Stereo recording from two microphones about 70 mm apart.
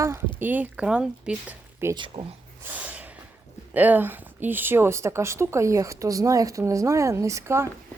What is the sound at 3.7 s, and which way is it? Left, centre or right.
Speech, right.